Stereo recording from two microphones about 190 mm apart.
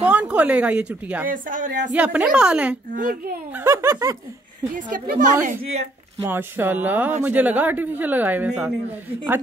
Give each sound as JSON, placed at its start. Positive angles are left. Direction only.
{"t": 0.0, "sound": "a woman's voice", "side_deg": -5}
{"t": 1.3, "sound": "a woman's voice", "side_deg": -45}
{"t": 1.9, "sound": "speech", "side_deg": -5}
{"t": 2.9, "sound": "a woman's voice", "side_deg": -45}
{"t": 3.5, "sound": "speech", "side_deg": -15}
{"t": 4.9, "sound": "a woman's voice", "side_deg": -45}
{"t": 6.2, "sound": "speech", "side_deg": -10}